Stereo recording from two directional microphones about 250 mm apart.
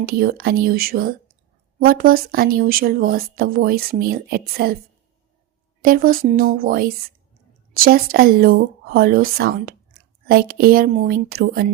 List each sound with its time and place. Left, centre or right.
0.0 s speech: right
5.8 s speech: right